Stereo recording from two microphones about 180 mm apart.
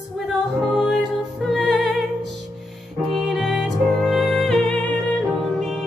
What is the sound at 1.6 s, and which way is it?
Music, centre (ahead or behind).